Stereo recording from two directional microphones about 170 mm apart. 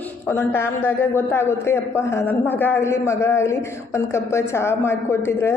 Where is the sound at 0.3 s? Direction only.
15° left (ahead or behind).